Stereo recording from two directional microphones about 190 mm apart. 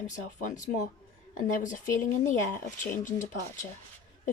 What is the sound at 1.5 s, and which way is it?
Speech, 45° left (ahead or behind).